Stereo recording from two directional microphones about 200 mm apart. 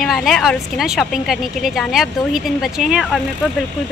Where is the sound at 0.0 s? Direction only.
Centre (ahead or behind).